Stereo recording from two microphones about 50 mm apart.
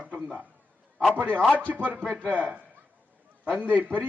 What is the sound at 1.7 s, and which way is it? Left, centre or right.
A man's voice, right.